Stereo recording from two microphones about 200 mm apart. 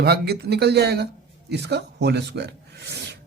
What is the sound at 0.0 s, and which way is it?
Speech, 55° right (ahead or behind).